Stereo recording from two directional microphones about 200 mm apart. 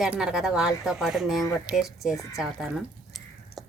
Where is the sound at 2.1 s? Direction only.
15° left (ahead or behind).